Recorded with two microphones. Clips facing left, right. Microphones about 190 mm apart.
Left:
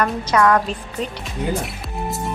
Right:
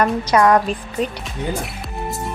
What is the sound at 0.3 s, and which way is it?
Speech, 20° right (ahead or behind).